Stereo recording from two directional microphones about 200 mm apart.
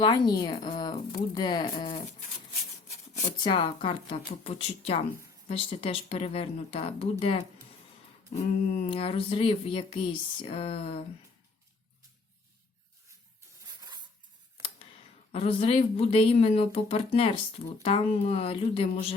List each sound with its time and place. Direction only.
0.0 s speech: 20° left (ahead or behind)
8.3 s a sound: 35° left (ahead or behind)
8.9 s speech: 30° left (ahead or behind)
15.3 s speech: 30° left (ahead or behind)